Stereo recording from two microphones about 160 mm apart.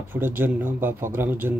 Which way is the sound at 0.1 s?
15° right (ahead or behind).